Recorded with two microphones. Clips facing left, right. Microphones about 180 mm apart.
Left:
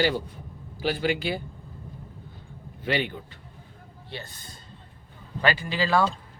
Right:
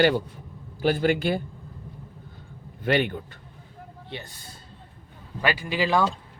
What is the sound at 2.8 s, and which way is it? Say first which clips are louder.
Speech: right 4 dB; 55° right (ahead or behind).